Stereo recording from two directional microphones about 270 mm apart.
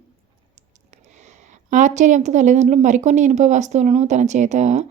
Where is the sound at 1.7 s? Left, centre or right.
Right.